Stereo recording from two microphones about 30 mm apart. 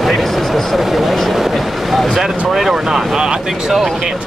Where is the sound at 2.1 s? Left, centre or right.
Centre.